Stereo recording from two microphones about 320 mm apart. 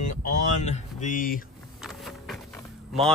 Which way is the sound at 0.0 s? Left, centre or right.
Left.